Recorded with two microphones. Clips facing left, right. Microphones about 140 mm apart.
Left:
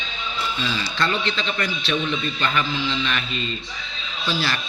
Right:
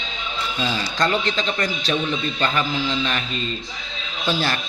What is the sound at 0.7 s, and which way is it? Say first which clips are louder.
A man's voice: right 4 dB; 40° right (ahead or behind).